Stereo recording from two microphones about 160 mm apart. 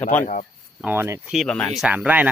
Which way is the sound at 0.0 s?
10° left (ahead or behind).